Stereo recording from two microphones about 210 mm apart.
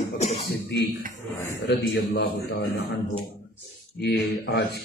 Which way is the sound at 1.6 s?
55° left (ahead or behind).